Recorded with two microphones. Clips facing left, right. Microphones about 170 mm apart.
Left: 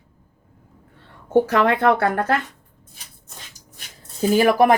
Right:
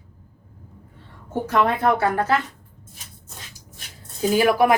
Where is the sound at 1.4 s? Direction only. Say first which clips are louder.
Left 2 dB; 75° left (ahead or behind).